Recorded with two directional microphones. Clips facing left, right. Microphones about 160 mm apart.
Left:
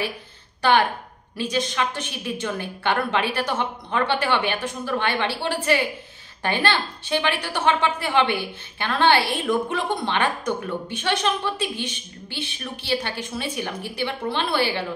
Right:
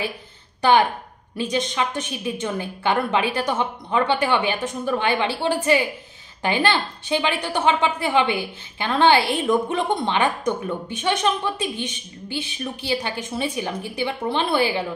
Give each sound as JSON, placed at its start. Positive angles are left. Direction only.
{"t": 0.6, "sound": "a woman's voice", "side_deg": -15}
{"t": 12.8, "sound": "a woman's voice", "side_deg": -15}